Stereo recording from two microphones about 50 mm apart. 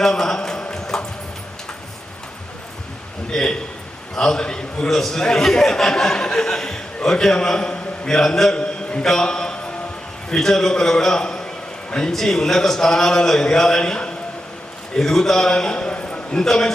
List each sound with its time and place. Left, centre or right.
0.0 s clip-clop: centre
3.3 s a man's voice: centre
8.5 s a sound: centre
9.0 s a man's voice: centre
16.3 s a man's voice: centre